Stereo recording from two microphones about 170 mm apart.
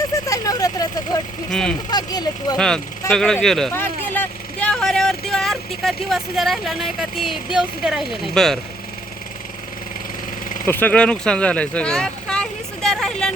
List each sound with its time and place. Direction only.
0.3 s speech: 20° left (ahead or behind)
1.5 s speech: 5° left (ahead or behind)
1.9 s speech: 25° left (ahead or behind)
2.6 s speech: 5° left (ahead or behind)
10.7 s speech: 10° left (ahead or behind)